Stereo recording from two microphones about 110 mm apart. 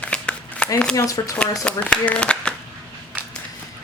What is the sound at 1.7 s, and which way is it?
Speech, 10° left (ahead or behind).